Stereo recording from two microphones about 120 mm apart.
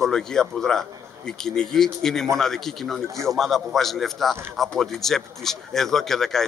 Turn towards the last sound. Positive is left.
turn(degrees=5)  # may be behind; listen again after turning